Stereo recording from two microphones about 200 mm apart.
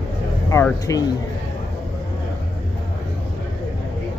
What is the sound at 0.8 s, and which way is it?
Speech, 20° left (ahead or behind).